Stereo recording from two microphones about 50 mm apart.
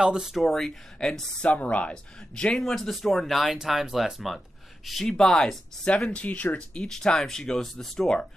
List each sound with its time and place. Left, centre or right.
0.2 s speech: centre
0.7 s speech: centre
1.4 s speech: left
2.3 s speech: centre
2.6 s speech: centre
3.5 s speech: centre
5.1 s speech: centre
6.2 s speech: left
6.8 s speech: centre